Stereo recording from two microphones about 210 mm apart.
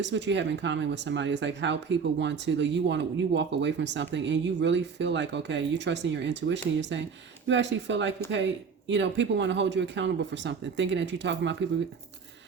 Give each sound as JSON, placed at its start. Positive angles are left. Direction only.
{"t": 0.0, "sound": "speech", "side_deg": -60}